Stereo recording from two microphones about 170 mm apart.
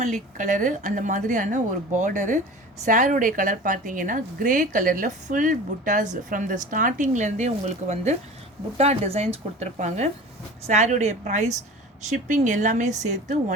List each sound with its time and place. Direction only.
0.0 s a woman's voice: 45° right (ahead or behind)